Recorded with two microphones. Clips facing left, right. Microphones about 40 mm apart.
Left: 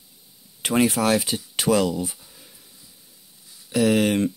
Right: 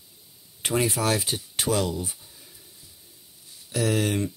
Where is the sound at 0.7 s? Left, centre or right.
Left.